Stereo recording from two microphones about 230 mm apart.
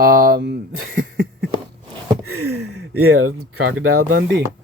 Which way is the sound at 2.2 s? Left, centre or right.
Right.